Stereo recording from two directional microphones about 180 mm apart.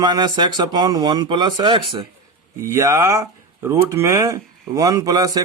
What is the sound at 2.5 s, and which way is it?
Speech, 15° right (ahead or behind).